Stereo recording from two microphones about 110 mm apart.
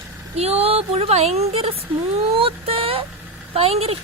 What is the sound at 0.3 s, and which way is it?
A woman's voice, 65° right (ahead or behind).